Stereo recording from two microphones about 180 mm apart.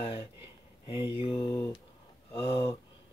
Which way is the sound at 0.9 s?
10° right (ahead or behind).